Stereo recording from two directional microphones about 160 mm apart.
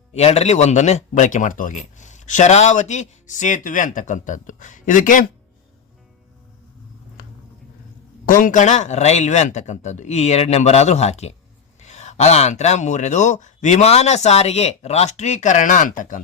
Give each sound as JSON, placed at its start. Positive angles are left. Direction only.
{"t": 0.1, "sound": "speech", "side_deg": 40}
{"t": 8.3, "sound": "speech", "side_deg": 55}